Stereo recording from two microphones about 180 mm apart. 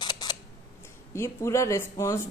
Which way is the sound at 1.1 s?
15° left (ahead or behind).